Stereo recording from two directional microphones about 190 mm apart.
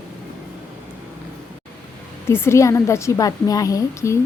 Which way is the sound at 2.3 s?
15° left (ahead or behind).